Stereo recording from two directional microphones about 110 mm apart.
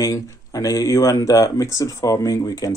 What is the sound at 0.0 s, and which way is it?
Speech, 30° left (ahead or behind).